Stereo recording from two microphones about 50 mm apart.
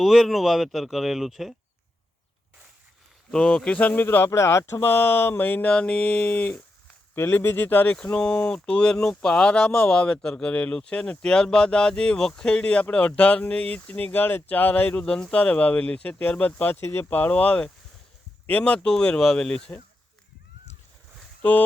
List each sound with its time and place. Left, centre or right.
0.0 s speech: centre
3.3 s speech: centre
3.8 s speech: left
4.0 s speech: left
4.3 s speech: left
5.4 s speech: left
5.7 s speech: left
7.2 s speech: left
7.9 s speech: left
14.1 s speech: left
15.0 s speech: centre
16.8 s speech: left
17.1 s speech: left; by 19.7 s centre